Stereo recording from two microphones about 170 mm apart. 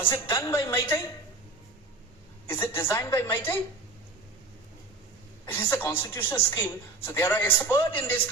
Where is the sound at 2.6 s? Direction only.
15° left (ahead or behind).